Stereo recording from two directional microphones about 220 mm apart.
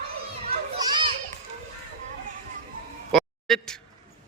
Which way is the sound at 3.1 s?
Centre (ahead or behind).